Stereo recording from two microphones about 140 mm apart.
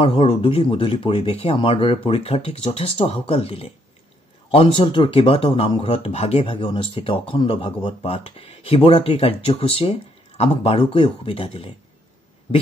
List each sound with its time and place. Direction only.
0.0 s speech: 40° left (ahead or behind)
7.8 s speech: 50° left (ahead or behind)